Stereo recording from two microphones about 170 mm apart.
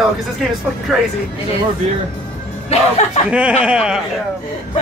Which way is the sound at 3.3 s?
5° right (ahead or behind).